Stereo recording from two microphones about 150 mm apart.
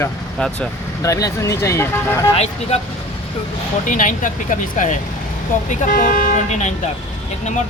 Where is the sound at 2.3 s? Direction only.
45° left (ahead or behind).